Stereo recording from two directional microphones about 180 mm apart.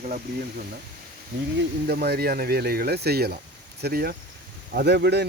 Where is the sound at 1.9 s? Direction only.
60° right (ahead or behind).